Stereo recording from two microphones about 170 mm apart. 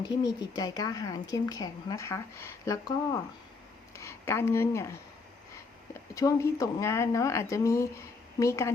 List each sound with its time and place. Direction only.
0.0 s speech: 25° left (ahead or behind)
6.1 s speech: 20° left (ahead or behind)